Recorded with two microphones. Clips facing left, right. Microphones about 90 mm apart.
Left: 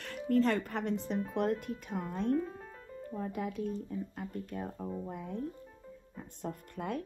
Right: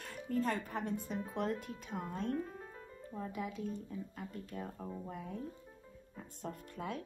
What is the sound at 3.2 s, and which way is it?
Speech, 50° left (ahead or behind).